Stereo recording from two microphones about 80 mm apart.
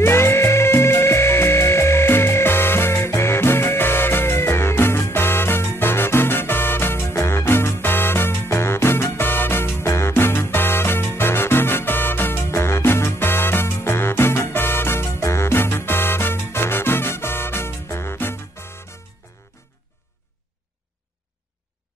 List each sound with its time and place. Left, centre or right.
0.0 s music: left